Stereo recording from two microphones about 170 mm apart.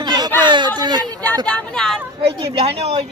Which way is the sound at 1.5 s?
5° left (ahead or behind).